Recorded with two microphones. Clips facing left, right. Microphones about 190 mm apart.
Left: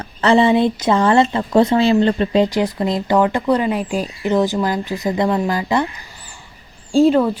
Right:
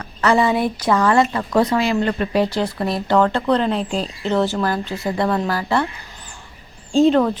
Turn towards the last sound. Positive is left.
turn(degrees=5)  # may be behind; listen again after turning